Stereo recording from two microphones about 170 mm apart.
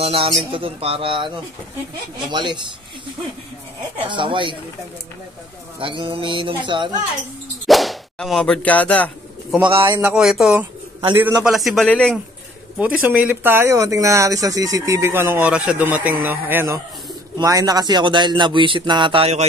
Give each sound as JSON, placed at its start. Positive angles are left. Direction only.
{"t": 0.0, "sound": "speech", "side_deg": -35}
{"t": 4.1, "sound": "speech", "side_deg": -30}
{"t": 5.8, "sound": "speech", "side_deg": -30}
{"t": 7.6, "sound": "whip", "side_deg": 0}
{"t": 9.8, "sound": "speech", "side_deg": -20}
{"t": 10.0, "sound": "speech", "side_deg": -5}
{"t": 11.5, "sound": "speech", "side_deg": 0}
{"t": 12.7, "sound": "speech", "side_deg": -10}